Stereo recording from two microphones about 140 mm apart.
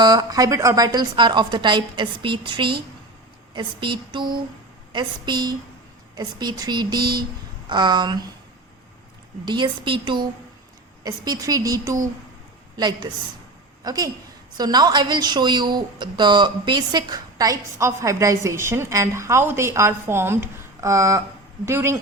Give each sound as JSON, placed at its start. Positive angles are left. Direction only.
{"t": 0.0, "sound": "a woman's voice", "side_deg": -30}
{"t": 9.5, "sound": "a woman's voice", "side_deg": -35}